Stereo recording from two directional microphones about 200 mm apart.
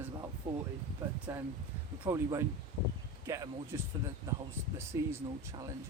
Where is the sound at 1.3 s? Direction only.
10° right (ahead or behind).